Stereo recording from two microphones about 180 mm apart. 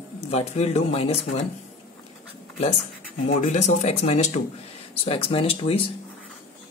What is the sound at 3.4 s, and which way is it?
Speech, 40° left (ahead or behind).